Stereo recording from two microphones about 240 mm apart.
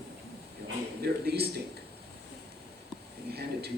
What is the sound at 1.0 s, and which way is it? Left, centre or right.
Speech, right.